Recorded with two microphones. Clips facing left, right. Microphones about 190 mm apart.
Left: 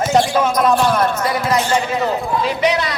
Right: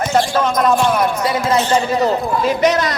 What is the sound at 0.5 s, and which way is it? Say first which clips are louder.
Speech: right 1 dB; centre (ahead or behind).